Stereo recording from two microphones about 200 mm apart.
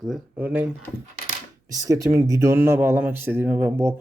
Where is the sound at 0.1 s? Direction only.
10° right (ahead or behind).